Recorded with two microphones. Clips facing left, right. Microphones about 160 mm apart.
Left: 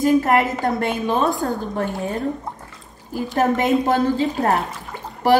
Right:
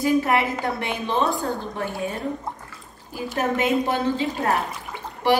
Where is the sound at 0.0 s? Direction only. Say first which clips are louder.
Left 4 dB; 45° left (ahead or behind).